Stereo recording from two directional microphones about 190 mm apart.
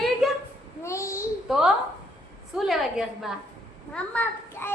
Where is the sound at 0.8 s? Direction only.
15° left (ahead or behind).